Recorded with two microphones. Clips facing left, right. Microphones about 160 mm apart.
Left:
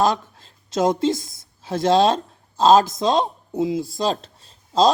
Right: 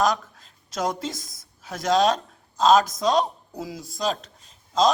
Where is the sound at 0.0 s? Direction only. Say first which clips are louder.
Left 3 dB; 30° left (ahead or behind).